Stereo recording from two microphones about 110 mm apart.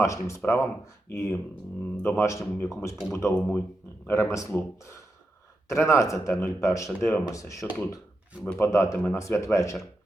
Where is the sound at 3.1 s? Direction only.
25° left (ahead or behind).